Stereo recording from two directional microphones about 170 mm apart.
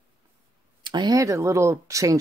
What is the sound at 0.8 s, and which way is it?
Speech, 25° right (ahead or behind).